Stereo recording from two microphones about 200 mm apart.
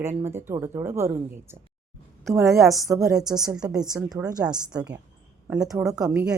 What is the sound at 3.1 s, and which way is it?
A woman's voice, 5° right (ahead or behind).